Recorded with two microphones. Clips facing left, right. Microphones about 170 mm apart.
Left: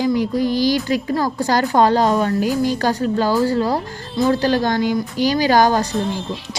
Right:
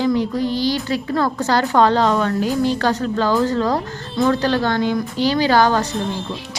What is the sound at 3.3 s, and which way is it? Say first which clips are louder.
A woman's voice: even; 35° left (ahead or behind).